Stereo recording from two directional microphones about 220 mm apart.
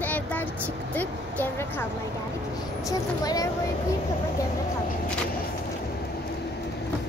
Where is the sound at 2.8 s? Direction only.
15° left (ahead or behind).